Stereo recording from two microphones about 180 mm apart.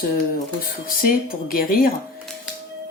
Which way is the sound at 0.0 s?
50° left (ahead or behind).